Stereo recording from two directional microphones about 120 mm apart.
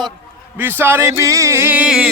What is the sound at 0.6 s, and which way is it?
Speech, 20° right (ahead or behind).